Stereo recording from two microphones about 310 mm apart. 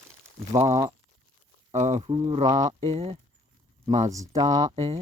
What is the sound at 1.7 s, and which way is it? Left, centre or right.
Speech, right.